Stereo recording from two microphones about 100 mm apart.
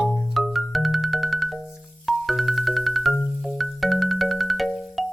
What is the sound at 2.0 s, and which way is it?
Marimba, centre (ahead or behind).